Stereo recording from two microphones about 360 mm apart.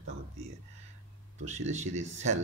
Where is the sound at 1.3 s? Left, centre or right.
Centre.